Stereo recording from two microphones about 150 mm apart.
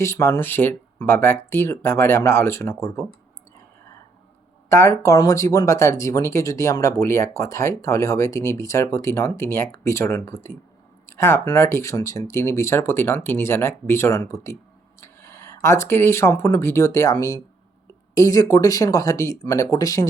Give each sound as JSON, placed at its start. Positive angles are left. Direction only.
{"t": 0.0, "sound": "speech", "side_deg": 15}
{"t": 4.7, "sound": "speech", "side_deg": 20}